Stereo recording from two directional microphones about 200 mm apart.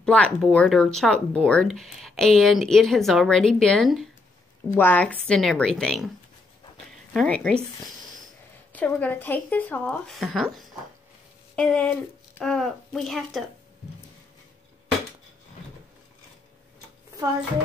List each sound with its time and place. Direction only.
0.0 s a woman's voice: 5° left (ahead or behind)
7.2 s a woman's voice: 5° left (ahead or behind)
8.7 s a woman's voice: 10° left (ahead or behind)